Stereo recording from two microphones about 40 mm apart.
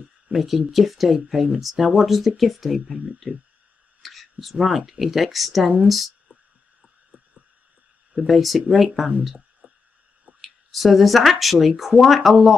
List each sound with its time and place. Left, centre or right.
0.3 s speech: centre
8.3 s speech: centre
9.6 s a sound: right
10.4 s speech: centre